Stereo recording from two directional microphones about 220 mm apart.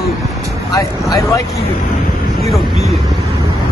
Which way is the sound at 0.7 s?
15° left (ahead or behind).